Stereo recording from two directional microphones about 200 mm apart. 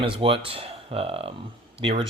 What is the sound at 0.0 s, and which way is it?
Speech, 25° right (ahead or behind).